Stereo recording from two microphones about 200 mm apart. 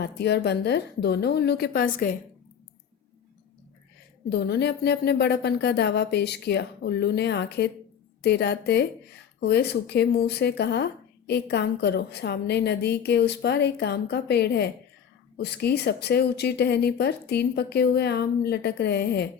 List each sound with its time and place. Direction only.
0.0 s speech: 55° left (ahead or behind)
4.3 s speech: 55° left (ahead or behind)